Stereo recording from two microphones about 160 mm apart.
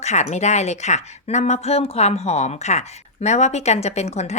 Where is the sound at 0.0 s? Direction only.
45° left (ahead or behind).